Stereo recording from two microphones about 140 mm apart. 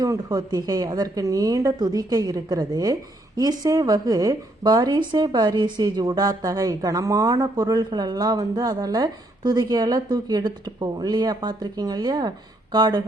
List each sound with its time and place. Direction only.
0.0 s a woman's voice: 25° right (ahead or behind)